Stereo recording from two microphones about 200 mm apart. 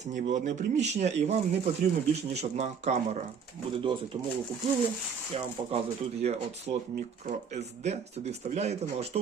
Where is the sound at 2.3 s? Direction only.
35° right (ahead or behind).